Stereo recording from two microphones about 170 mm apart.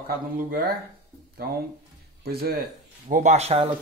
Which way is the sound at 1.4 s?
65° right (ahead or behind).